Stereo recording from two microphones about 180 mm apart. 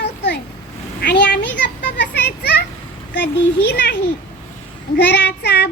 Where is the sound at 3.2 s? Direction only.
70° left (ahead or behind).